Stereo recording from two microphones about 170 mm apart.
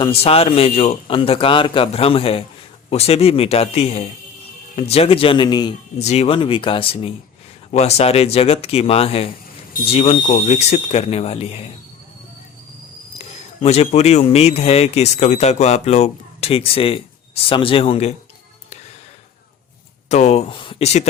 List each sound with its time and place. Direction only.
0.0 s speech: 35° left (ahead or behind)
6.0 s speech: 40° left (ahead or behind)
13.1 s speech: 35° left (ahead or behind)
20.1 s speech: 40° left (ahead or behind)